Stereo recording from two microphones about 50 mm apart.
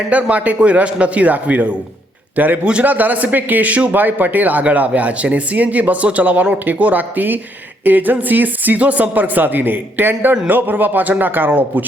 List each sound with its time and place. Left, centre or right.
0.1 s a man's voice: right